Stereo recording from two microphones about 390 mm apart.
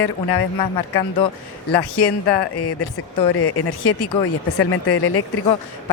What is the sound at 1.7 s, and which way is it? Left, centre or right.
Speech, left.